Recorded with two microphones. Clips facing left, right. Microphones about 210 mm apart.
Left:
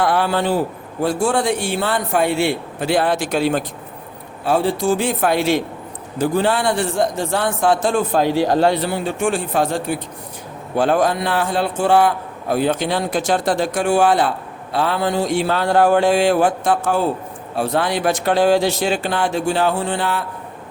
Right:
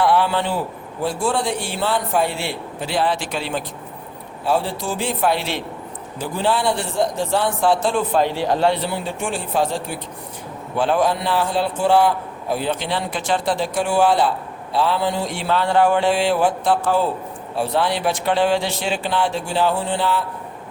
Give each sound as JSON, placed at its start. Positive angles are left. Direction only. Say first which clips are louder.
{"t": 0.0, "sound": "a man's voice", "louder": "even", "side_deg": 45}